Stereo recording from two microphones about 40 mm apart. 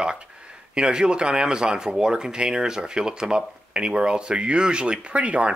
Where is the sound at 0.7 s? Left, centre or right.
Right.